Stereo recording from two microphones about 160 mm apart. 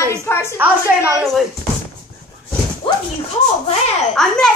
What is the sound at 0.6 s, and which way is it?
Speech, 10° right (ahead or behind).